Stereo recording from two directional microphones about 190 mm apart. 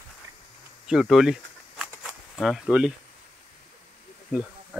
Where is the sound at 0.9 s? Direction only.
Centre (ahead or behind).